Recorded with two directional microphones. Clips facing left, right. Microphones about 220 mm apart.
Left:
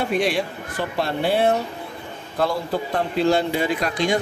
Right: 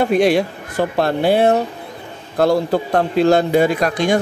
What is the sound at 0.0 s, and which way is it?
Speech, 45° right (ahead or behind).